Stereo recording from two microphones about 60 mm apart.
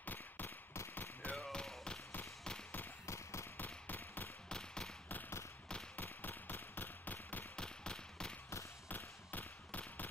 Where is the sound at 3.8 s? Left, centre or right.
Left.